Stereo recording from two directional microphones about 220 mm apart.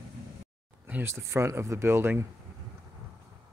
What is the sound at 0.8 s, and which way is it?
Speech, 10° right (ahead or behind).